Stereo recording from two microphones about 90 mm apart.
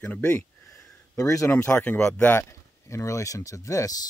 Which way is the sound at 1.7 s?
15° left (ahead or behind).